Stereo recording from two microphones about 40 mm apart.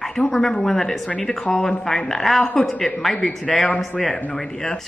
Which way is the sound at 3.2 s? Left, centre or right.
Left.